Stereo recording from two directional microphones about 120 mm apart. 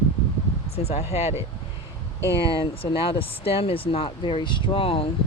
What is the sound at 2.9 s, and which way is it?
Speech, 50° left (ahead or behind).